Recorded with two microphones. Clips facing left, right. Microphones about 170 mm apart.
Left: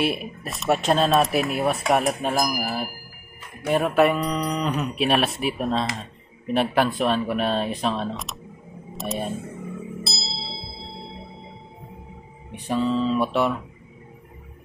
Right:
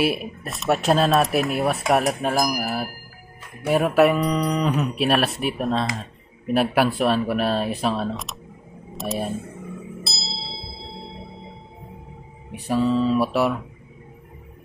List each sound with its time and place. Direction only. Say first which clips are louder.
0.0 s speech: right 2 dB; centre (ahead or behind)
10.0 s tubular bells: left 1 dB; centre (ahead or behind)
12.6 s speech: right 2 dB; 5° right (ahead or behind)